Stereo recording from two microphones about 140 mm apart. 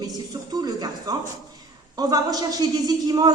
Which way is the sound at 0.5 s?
30° right (ahead or behind).